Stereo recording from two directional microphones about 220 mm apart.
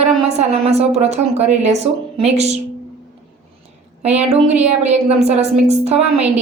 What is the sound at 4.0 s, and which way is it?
A woman's voice, 30° right (ahead or behind).